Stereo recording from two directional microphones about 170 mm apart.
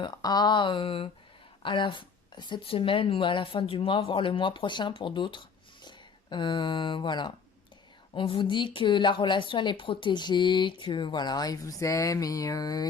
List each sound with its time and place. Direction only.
0.0 s speech: 25° left (ahead or behind)